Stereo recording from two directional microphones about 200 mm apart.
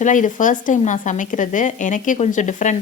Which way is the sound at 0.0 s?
40° left (ahead or behind).